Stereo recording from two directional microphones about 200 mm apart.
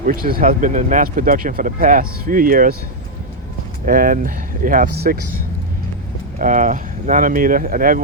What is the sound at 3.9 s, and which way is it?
Speech, 45° right (ahead or behind).